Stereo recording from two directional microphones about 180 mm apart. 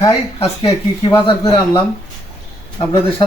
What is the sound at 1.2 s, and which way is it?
Speech, 25° left (ahead or behind).